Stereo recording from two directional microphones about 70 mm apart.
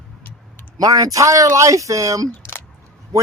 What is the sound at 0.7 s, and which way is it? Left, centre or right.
Speech, right.